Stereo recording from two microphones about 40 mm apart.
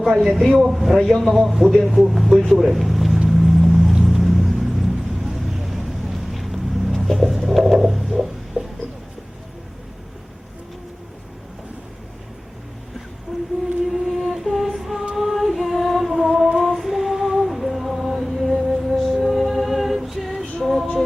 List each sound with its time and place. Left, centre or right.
0.3 s a man's voice: centre
3.2 s vehicle: centre
13.3 s a sound: centre
13.8 s music: centre
15.1 s humming: centre
19.2 s music: centre